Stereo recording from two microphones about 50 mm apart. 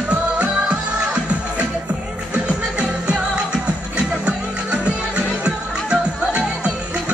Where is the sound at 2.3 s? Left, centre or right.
Right.